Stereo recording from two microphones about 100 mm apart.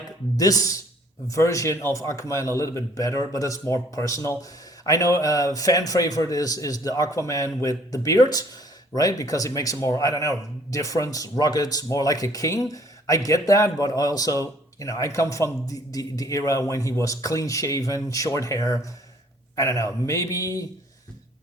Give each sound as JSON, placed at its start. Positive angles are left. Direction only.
{"t": 0.3, "sound": "a man's voice", "side_deg": 35}